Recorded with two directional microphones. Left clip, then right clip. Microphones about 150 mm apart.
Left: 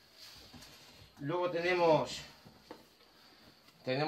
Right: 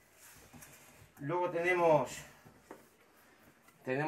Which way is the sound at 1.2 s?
10° left (ahead or behind).